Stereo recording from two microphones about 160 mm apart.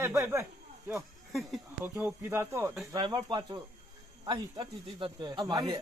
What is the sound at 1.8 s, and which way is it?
Speech, 10° right (ahead or behind).